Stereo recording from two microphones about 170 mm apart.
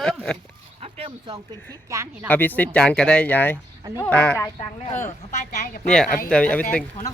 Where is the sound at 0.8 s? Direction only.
35° right (ahead or behind).